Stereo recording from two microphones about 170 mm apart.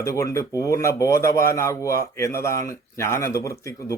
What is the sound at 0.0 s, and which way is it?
Speech, 20° left (ahead or behind).